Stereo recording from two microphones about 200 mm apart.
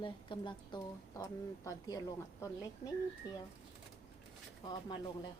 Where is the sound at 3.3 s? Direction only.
20° left (ahead or behind).